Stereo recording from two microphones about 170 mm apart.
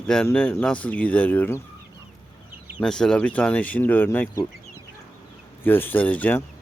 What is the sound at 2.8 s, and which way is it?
Speech, 5° left (ahead or behind).